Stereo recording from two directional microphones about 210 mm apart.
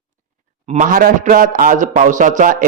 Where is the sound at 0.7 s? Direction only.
40° right (ahead or behind).